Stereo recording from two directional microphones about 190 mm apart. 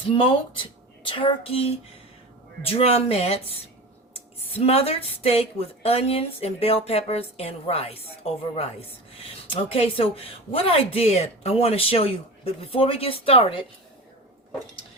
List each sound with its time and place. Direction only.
0.2 s speech: 30° left (ahead or behind)
4.6 s speech: 30° left (ahead or behind)